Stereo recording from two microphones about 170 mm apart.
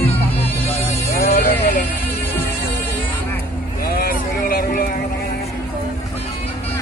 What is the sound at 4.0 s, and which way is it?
Vehicle, 60° left (ahead or behind).